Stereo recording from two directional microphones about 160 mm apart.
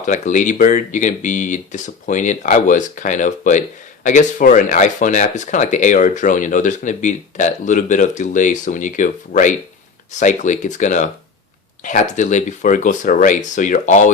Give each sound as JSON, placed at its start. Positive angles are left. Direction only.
{"t": 0.0, "sound": "speech", "side_deg": 50}